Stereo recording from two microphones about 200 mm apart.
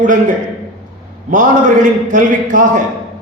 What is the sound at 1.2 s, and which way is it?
A man's voice, 40° right (ahead or behind).